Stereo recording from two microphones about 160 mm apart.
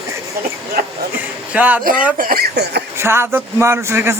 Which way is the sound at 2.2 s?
65° right (ahead or behind).